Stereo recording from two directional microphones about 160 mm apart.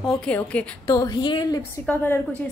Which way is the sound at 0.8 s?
25° left (ahead or behind).